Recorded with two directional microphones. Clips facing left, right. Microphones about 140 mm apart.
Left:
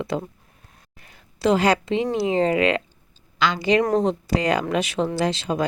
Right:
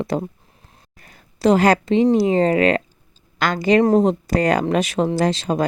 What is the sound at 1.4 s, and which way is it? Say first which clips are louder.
A woman's voice: right 4 dB; 45° right (ahead or behind).